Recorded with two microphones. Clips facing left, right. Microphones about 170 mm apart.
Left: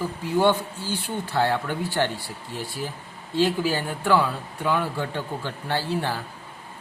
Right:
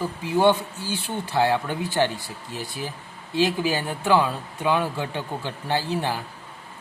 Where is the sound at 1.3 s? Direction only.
15° right (ahead or behind).